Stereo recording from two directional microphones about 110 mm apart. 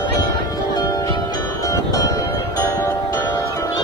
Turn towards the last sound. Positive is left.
turn(degrees=30)  # may be behind; listen again after turning